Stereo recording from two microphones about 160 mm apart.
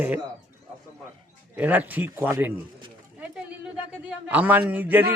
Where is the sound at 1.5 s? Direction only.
10° right (ahead or behind).